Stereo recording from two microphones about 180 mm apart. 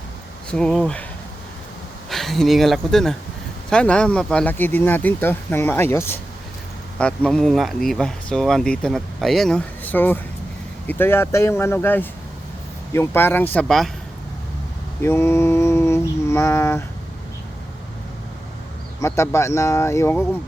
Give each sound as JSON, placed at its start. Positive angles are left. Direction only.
{"t": 0.5, "sound": "speech", "side_deg": 5}
{"t": 2.0, "sound": "speech", "side_deg": 0}
{"t": 15.0, "sound": "mantra", "side_deg": 15}
{"t": 18.9, "sound": "speech", "side_deg": 15}